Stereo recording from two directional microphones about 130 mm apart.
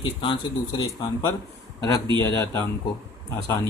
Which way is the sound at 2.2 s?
25° left (ahead or behind).